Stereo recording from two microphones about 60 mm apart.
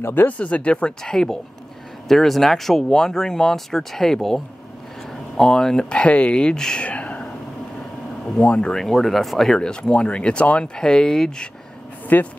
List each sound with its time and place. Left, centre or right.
0.0 s speech: left
0.3 s speech: left
6.9 s a sound: left
8.4 s speech: centre
8.7 s speech: centre
12.1 s speech: left